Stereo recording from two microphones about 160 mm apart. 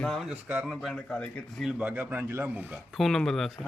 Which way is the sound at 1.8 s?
10° right (ahead or behind).